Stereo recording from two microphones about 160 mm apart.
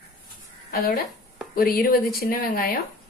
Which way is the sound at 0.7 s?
70° left (ahead or behind).